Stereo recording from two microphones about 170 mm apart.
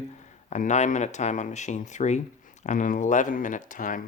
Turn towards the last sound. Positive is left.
turn(degrees=50)  # may be behind; listen again after turning